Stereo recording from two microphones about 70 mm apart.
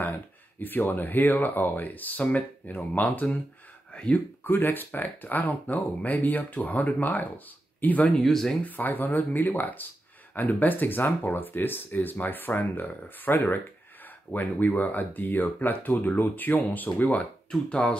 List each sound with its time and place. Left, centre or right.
0.0 s speech: left
4.5 s speech: left
8.2 s speech: centre
8.6 s speech: left
17.5 s speech: centre